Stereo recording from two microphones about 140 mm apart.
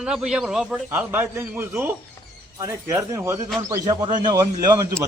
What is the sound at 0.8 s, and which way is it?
A man's voice, 15° right (ahead or behind).